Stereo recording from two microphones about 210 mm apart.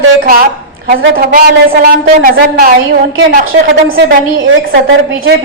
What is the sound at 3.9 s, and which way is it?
A woman's voice, 55° right (ahead or behind).